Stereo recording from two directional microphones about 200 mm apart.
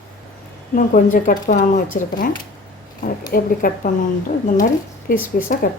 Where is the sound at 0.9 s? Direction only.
45° left (ahead or behind).